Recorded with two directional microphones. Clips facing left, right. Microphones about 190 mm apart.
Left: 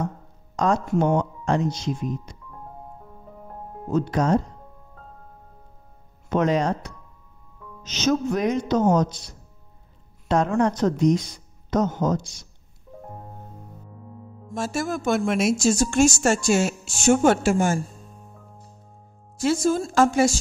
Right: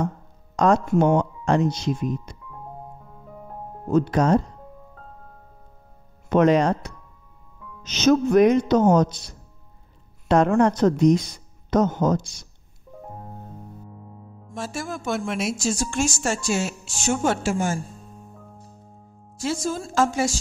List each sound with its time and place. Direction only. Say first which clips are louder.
0.6 s speech: right 3 dB; 65° right (ahead or behind)
3.9 s speech: right 2 dB; 65° right (ahead or behind)
6.2 s speech: right 4 dB; 65° right (ahead or behind)
7.8 s speech: right 4 dB; 60° right (ahead or behind)
10.2 s speech: right 3 dB; 65° right (ahead or behind)
14.5 s a woman's voice: left 4 dB; 45° left (ahead or behind)
19.4 s a woman's voice: left 5 dB; 55° left (ahead or behind)